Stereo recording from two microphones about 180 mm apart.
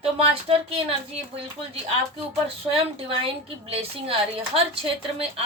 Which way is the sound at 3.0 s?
30° right (ahead or behind).